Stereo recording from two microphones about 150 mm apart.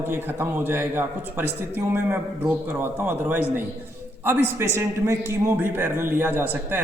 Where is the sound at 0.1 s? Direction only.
15° right (ahead or behind).